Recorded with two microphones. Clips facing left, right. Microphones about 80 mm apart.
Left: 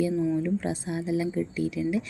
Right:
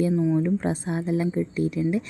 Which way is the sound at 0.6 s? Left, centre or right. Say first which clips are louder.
Right 4 dB; right.